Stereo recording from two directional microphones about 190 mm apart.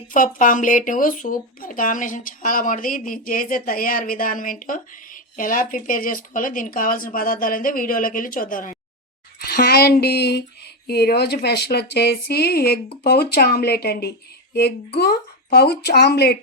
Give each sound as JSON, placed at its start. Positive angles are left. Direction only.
{"t": 0.1, "sound": "speech", "side_deg": 45}
{"t": 15.5, "sound": "speech", "side_deg": 55}